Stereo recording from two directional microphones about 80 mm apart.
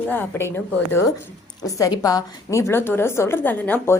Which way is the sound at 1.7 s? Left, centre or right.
Left.